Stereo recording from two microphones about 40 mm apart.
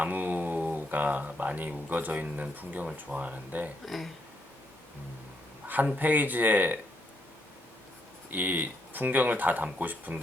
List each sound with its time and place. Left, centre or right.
0.0 s speech: right
3.8 s speech: centre
5.6 s a sound: right
6.0 s speech: right
8.3 s speech: right